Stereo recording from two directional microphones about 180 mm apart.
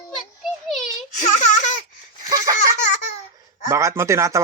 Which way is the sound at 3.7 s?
15° right (ahead or behind).